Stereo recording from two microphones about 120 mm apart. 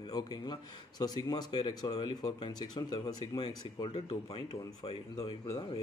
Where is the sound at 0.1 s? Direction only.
35° left (ahead or behind).